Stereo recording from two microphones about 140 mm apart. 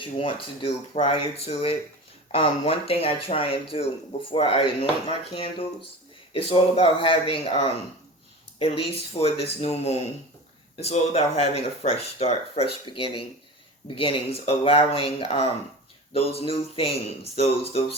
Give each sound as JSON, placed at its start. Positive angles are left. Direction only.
{"t": 0.0, "sound": "speech", "side_deg": 40}
{"t": 12.8, "sound": "speech", "side_deg": 35}